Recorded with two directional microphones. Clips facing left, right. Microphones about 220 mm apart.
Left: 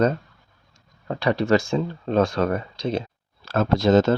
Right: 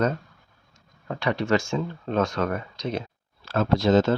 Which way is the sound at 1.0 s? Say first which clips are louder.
Left 4 dB; 35° left (ahead or behind).